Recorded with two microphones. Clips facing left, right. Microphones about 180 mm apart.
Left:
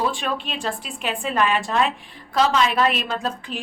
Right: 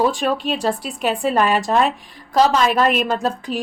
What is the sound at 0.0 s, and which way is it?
A woman's voice, 40° right (ahead or behind).